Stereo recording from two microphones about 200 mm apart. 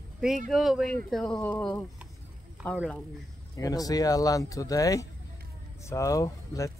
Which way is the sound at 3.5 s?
15° left (ahead or behind).